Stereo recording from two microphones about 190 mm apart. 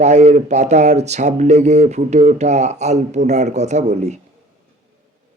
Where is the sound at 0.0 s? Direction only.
35° right (ahead or behind).